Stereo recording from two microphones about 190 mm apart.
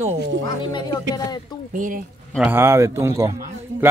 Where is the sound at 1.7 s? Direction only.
45° right (ahead or behind).